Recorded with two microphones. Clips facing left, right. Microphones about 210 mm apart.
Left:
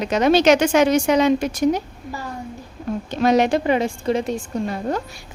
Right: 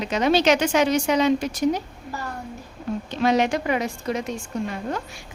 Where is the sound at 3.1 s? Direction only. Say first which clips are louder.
Left 4 dB; 40° left (ahead or behind).